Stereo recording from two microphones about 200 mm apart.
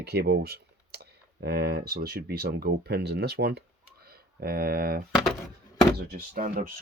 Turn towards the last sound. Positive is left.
turn(degrees=-45)  # may be behind; listen again after turning